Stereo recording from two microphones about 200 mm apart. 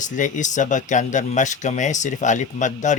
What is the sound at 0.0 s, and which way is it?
Speech, 40° left (ahead or behind).